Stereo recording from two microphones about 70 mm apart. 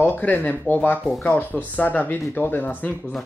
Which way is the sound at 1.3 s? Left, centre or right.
Left.